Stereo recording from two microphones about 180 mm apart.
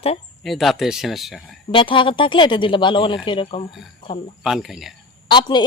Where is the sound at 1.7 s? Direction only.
30° left (ahead or behind).